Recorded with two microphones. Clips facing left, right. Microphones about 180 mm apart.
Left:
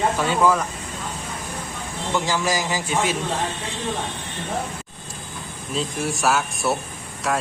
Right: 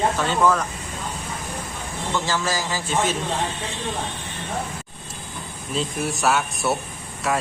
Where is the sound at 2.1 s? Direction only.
15° left (ahead or behind).